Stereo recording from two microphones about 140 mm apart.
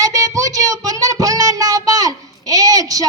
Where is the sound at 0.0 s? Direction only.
25° right (ahead or behind).